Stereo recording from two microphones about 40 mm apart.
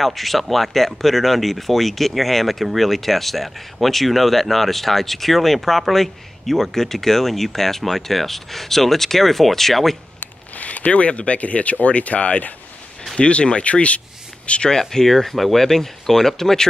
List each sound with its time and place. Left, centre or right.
0.0 s speech: centre
10.2 s speech: left
14.7 s speech: centre